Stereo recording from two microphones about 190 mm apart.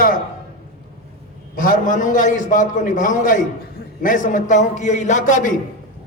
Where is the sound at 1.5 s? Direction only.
45° left (ahead or behind).